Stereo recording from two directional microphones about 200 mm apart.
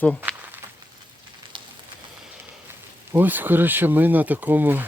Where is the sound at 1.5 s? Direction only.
25° right (ahead or behind).